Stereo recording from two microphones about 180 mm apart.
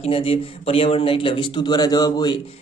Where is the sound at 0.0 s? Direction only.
35° left (ahead or behind).